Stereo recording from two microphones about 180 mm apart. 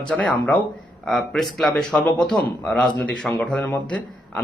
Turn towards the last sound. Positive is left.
turn(degrees=10)  # may be behind; listen again after turning